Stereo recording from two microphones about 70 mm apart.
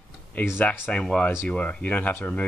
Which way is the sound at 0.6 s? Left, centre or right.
Centre.